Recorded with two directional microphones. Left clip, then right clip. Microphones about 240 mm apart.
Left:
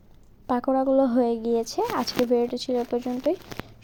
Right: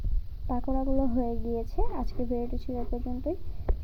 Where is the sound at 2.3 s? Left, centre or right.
Left.